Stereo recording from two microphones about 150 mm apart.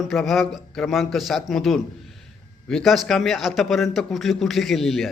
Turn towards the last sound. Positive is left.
turn(degrees=0)  # may be behind; listen again after turning